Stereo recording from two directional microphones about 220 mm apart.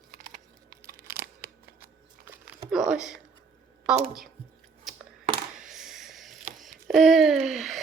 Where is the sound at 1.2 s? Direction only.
45° right (ahead or behind).